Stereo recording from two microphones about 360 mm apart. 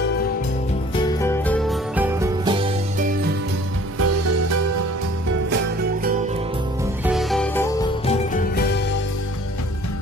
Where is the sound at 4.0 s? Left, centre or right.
Right.